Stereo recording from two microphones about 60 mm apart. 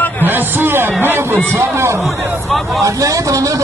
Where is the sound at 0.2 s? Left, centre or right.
Right.